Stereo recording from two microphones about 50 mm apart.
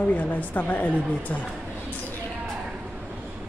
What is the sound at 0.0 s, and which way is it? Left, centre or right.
Speech, left.